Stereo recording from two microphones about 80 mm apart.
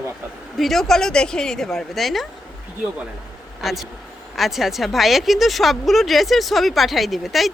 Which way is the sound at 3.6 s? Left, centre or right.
Centre.